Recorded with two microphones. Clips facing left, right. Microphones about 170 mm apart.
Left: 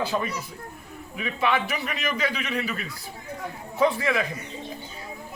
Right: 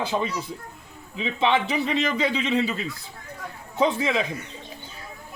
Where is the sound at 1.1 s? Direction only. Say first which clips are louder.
Right 3 dB; 25° right (ahead or behind).